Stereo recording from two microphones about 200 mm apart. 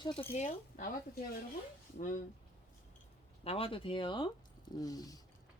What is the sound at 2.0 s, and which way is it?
Speech, 40° left (ahead or behind).